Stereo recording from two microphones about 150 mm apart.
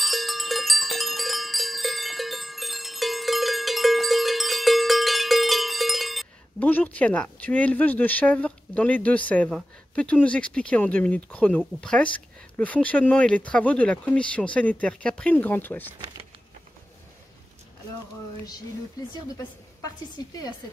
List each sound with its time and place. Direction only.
0.0 s cowbell: centre (ahead or behind)
6.6 s speech: 10° left (ahead or behind)
20.2 s speech: 25° left (ahead or behind)